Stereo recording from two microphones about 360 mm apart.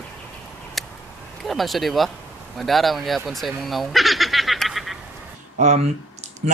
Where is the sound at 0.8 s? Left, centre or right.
Centre.